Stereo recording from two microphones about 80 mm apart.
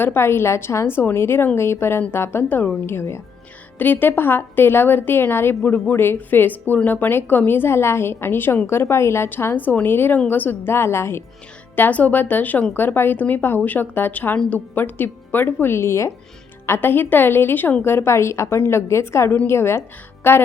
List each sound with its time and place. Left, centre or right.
0.0 s a woman's voice: left
3.8 s a woman's voice: left
11.8 s a woman's voice: centre